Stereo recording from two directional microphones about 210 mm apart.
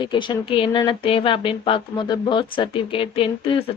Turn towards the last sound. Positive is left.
turn(degrees=25)  # may be behind; listen again after turning